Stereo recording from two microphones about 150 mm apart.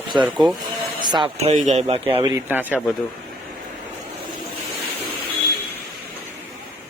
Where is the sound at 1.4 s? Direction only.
50° right (ahead or behind).